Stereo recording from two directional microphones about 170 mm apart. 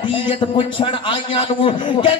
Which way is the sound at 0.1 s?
30° left (ahead or behind).